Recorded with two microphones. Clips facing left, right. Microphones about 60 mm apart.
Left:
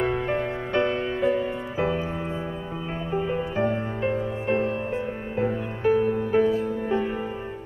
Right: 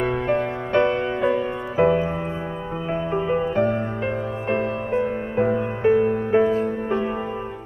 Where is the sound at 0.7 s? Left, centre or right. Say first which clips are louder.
Right 5 dB; right.